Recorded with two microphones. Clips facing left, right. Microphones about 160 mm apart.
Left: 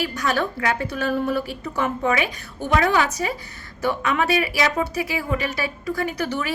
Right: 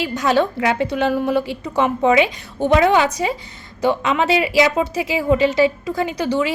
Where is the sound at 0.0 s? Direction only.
25° right (ahead or behind).